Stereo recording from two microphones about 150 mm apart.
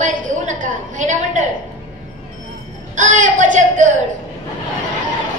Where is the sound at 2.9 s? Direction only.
55° right (ahead or behind).